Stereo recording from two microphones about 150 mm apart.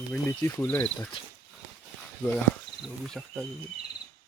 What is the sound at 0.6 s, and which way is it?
Speech, 10° left (ahead or behind).